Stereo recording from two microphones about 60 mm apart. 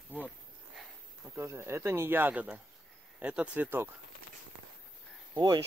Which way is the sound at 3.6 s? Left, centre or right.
Right.